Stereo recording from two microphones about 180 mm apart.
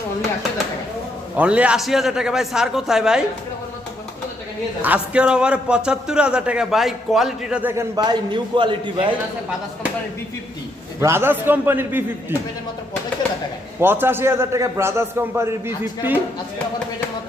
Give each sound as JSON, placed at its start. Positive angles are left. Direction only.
{"t": 1.4, "sound": "a man's voice", "side_deg": -5}
{"t": 4.8, "sound": "a man's voice", "side_deg": -5}
{"t": 7.9, "sound": "a man's voice", "side_deg": -25}
{"t": 11.0, "sound": "a man's voice", "side_deg": -15}
{"t": 13.7, "sound": "a man's voice", "side_deg": -10}